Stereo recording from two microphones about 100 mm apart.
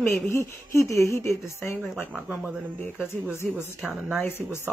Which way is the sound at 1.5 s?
30° left (ahead or behind).